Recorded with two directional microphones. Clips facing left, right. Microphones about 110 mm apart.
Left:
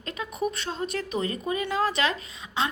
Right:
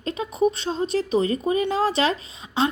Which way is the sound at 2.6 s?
30° right (ahead or behind).